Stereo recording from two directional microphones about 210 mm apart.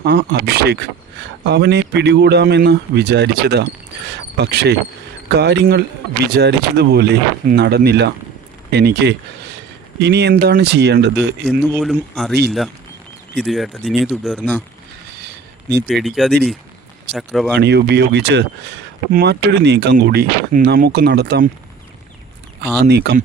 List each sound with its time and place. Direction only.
0.0 s speech: 60° right (ahead or behind)
11.8 s speech: centre (ahead or behind)
15.9 s speech: centre (ahead or behind)
17.6 s speech: 50° right (ahead or behind)
22.6 s speech: 50° right (ahead or behind)